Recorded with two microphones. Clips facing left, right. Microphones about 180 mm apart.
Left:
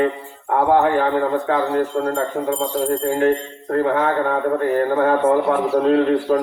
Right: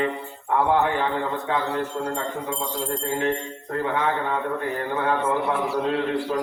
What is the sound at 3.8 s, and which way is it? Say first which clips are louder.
Speech: left 6 dB; 45° left (ahead or behind).